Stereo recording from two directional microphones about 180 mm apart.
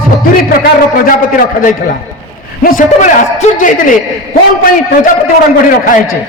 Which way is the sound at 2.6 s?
50° left (ahead or behind).